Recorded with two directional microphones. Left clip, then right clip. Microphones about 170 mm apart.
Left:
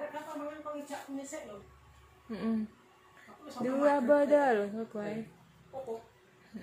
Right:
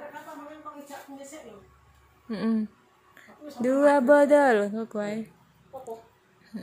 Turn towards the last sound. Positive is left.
turn(degrees=-70)  # may be behind; listen again after turning